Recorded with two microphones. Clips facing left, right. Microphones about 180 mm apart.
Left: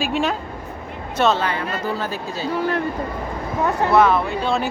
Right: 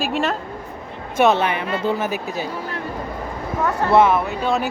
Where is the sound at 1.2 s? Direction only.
20° right (ahead or behind).